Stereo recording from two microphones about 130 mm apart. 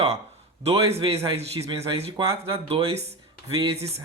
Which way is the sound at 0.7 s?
50° right (ahead or behind).